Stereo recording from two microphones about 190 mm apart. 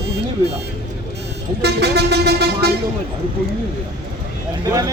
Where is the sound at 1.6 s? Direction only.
60° right (ahead or behind).